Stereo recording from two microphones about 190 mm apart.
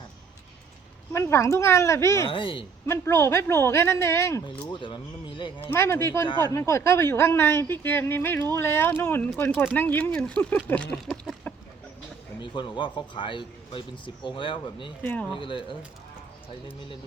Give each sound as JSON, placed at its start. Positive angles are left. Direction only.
{"t": 1.1, "sound": "speech", "side_deg": 15}
{"t": 2.3, "sound": "speech", "side_deg": 25}
{"t": 2.8, "sound": "speech", "side_deg": 15}
{"t": 4.7, "sound": "speech", "side_deg": 25}
{"t": 5.7, "sound": "speech", "side_deg": 15}
{"t": 10.9, "sound": "a sound", "side_deg": 0}
{"t": 12.4, "sound": "speech", "side_deg": 25}
{"t": 15.0, "sound": "speech", "side_deg": 10}
{"t": 15.3, "sound": "speech", "side_deg": 25}